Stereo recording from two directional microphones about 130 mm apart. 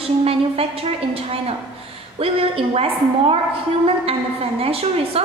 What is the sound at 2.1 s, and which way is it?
A woman's voice, 50° right (ahead or behind).